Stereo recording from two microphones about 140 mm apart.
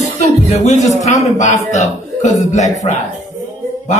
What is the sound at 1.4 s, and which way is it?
A man's voice, 60° left (ahead or behind).